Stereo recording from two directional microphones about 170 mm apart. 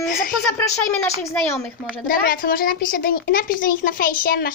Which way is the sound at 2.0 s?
55° left (ahead or behind).